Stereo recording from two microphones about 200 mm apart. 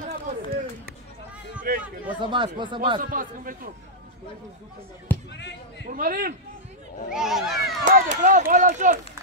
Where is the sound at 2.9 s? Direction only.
45° right (ahead or behind).